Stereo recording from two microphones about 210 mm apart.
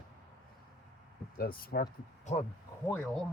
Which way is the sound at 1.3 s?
45° left (ahead or behind).